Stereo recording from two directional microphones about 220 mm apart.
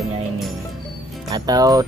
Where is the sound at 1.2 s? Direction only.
15° right (ahead or behind).